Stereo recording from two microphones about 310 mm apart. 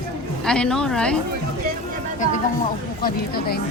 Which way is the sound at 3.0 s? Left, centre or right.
Left.